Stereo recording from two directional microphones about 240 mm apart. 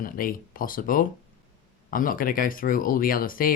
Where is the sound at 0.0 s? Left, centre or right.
Left.